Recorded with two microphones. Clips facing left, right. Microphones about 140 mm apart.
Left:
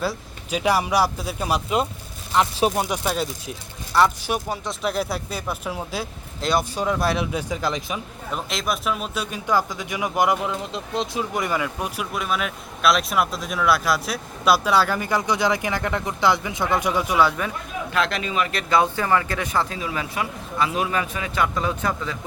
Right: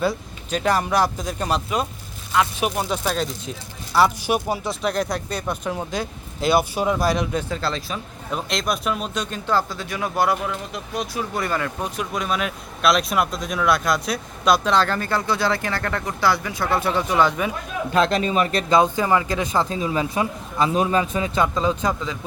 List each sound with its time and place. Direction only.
0.0 s speech: 5° left (ahead or behind)
2.4 s speech: 30° left (ahead or behind)
2.7 s speech: 10° left (ahead or behind)
3.9 s speech: 10° right (ahead or behind); by 8.0 s 15° left (ahead or behind)
8.3 s speech: centre (ahead or behind)
17.9 s a man's voice: 30° right (ahead or behind)
18.7 s speech: 20° right (ahead or behind)